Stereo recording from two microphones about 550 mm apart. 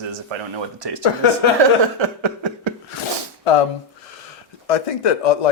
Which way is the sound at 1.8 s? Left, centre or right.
Right.